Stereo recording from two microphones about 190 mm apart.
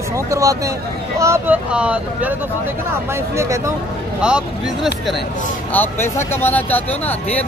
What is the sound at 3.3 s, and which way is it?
Speech, 15° right (ahead or behind).